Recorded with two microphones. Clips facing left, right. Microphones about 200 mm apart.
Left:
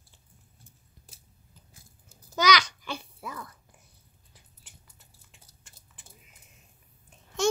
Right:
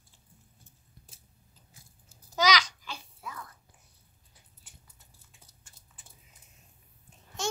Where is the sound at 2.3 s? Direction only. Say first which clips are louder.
Left 2 dB; 60° left (ahead or behind).